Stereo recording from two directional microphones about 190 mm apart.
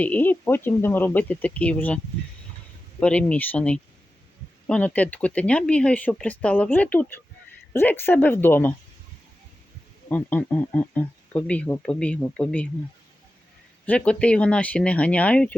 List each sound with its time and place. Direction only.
0.0 s speech: 10° left (ahead or behind)
3.0 s speech: 5° left (ahead or behind)
10.1 s speech: 10° left (ahead or behind)
13.8 s speech: 5° left (ahead or behind)